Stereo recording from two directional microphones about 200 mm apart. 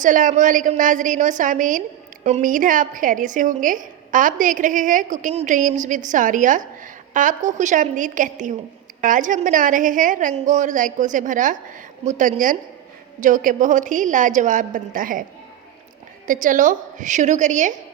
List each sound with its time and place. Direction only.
0.0 s a woman's voice: 40° right (ahead or behind)
16.2 s a woman's voice: 40° right (ahead or behind)